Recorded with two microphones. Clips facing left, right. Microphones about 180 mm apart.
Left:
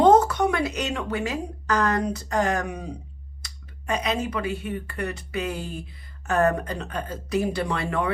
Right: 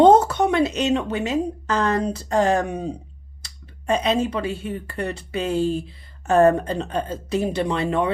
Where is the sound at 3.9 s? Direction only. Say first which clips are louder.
Right 5 dB; 30° right (ahead or behind).